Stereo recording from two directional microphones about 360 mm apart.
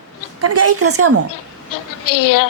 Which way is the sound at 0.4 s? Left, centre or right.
Right.